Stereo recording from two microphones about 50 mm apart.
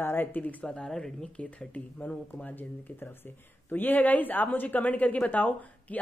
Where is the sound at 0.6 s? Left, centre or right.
Centre.